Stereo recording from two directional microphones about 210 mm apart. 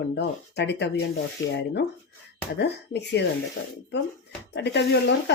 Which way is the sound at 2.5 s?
55° left (ahead or behind).